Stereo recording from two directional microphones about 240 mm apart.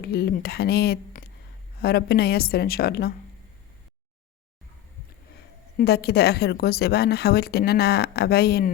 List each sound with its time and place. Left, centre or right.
0.0 s a woman's voice: left
5.7 s a woman's voice: left